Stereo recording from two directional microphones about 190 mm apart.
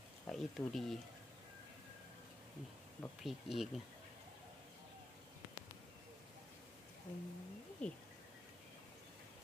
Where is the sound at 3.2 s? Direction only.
Centre (ahead or behind).